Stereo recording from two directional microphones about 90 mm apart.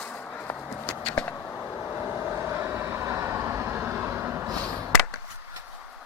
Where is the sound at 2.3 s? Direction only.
25° right (ahead or behind).